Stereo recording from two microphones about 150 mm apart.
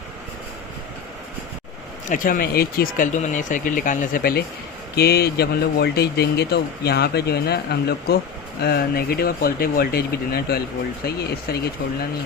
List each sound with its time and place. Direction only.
2.0 s speech: 65° left (ahead or behind); by 12.0 s 90° left